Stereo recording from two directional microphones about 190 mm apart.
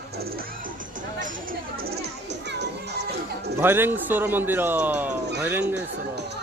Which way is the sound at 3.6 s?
10° right (ahead or behind).